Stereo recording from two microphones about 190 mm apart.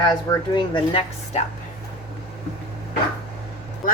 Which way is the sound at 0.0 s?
25° left (ahead or behind).